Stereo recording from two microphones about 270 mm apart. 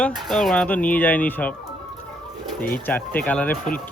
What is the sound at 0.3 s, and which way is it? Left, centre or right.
Speech, centre.